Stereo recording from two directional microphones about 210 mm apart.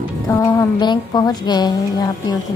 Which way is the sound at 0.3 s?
20° left (ahead or behind).